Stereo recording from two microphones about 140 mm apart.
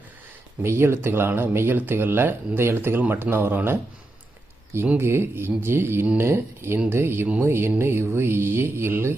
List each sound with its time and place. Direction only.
0.6 s speech: 20° right (ahead or behind)